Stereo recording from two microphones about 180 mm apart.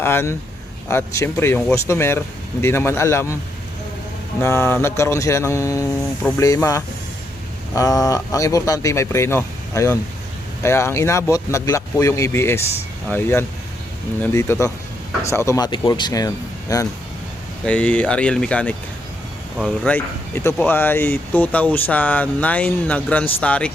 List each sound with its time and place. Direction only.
0.0 s speech: 15° left (ahead or behind)
4.4 s speech: 15° left (ahead or behind)
17.7 s speech: 5° left (ahead or behind)